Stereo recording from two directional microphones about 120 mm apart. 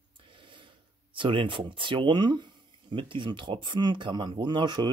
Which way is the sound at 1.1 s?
45° right (ahead or behind).